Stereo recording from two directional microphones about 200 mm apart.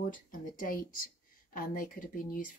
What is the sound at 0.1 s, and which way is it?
Speech, 45° left (ahead or behind).